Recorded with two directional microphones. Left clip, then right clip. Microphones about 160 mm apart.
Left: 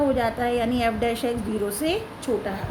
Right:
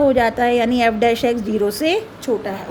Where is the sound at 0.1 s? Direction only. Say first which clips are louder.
Right 8 dB; 55° right (ahead or behind).